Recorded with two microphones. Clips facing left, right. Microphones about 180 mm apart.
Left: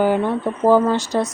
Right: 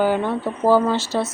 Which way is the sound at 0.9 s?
15° left (ahead or behind).